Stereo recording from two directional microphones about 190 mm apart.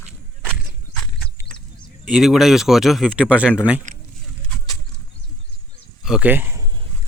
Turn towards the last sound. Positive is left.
turn(degrees=-10)  # may be behind; listen again after turning